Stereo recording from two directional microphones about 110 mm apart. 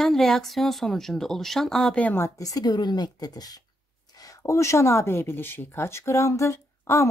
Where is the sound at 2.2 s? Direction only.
30° left (ahead or behind).